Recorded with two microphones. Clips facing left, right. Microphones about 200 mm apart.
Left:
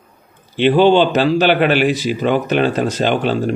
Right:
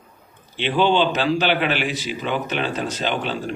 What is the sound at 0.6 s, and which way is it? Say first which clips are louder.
A man's voice: left 8 dB; 50° left (ahead or behind).